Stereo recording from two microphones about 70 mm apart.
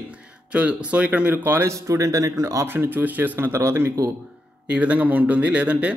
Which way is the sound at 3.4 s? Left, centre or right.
Right.